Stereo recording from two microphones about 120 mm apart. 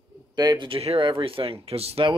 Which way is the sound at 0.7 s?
50° right (ahead or behind).